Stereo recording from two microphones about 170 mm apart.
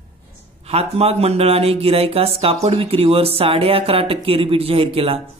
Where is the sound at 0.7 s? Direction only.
35° right (ahead or behind).